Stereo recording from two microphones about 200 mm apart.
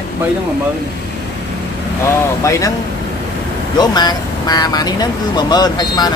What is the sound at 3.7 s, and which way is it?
Speech, 20° left (ahead or behind).